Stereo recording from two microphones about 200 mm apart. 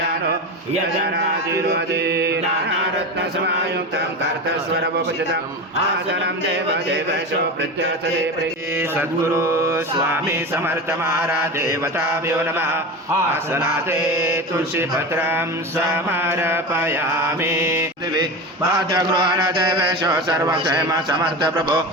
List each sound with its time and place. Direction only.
1.7 s mantra: 55° right (ahead or behind)
8.7 s mantra: 10° right (ahead or behind)
14.3 s mantra: 10° right (ahead or behind)